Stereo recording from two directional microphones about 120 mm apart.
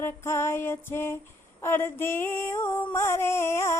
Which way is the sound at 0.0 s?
20° left (ahead or behind).